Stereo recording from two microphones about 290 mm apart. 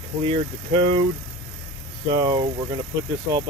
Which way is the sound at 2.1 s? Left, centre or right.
Centre.